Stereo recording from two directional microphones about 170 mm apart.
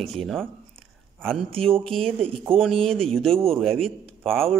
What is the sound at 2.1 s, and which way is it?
Speech, 30° right (ahead or behind).